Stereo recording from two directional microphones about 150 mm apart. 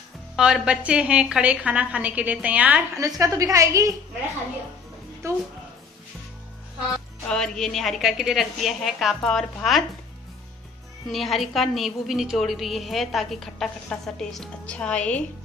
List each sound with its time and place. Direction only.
0.4 s a woman's voice: 5° right (ahead or behind)
3.0 s a woman's voice: 25° right (ahead or behind)
5.2 s a woman's voice: 20° right (ahead or behind)
7.2 s a woman's voice: 5° left (ahead or behind)
11.1 s a woman's voice: centre (ahead or behind)